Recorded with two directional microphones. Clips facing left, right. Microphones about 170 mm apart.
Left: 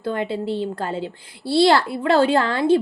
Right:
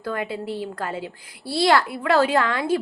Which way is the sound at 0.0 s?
25° left (ahead or behind).